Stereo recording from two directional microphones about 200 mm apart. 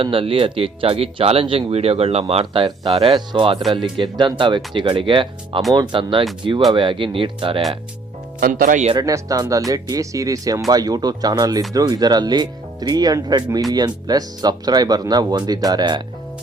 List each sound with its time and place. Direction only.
0.0 s speech: 25° right (ahead or behind)
8.4 s speech: 45° right (ahead or behind)
9.0 s speech: 15° right (ahead or behind)